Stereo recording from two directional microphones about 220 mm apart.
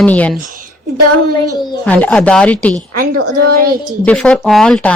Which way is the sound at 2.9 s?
90° right.